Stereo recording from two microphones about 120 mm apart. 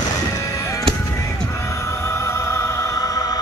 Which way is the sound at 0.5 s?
30° left (ahead or behind).